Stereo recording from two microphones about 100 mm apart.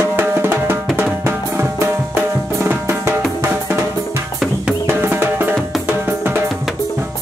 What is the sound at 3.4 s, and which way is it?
Drum, 20° right (ahead or behind).